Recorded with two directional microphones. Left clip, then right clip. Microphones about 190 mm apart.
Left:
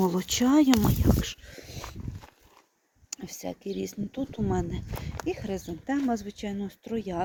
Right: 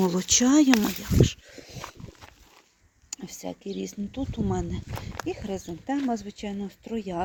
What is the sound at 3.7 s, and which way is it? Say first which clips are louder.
Speech: even; 5° left (ahead or behind).